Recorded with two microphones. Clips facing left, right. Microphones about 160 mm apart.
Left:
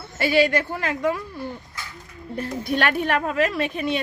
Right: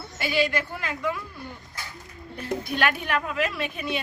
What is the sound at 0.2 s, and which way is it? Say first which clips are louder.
A woman's voice: left 6 dB; 45° left (ahead or behind).